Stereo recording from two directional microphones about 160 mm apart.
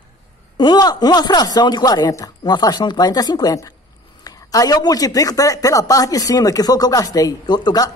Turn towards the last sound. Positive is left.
turn(degrees=25)  # may be behind; listen again after turning